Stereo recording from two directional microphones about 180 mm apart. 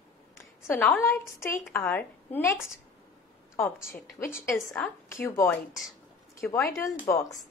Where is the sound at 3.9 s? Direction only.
15° left (ahead or behind).